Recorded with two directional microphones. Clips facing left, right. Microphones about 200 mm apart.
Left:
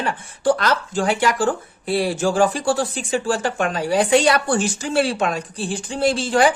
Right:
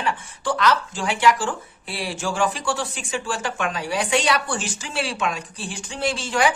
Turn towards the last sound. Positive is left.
turn(degrees=35)  # may be behind; listen again after turning